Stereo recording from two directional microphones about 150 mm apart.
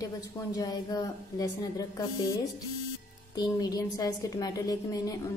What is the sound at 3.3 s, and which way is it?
A woman's voice, 25° left (ahead or behind).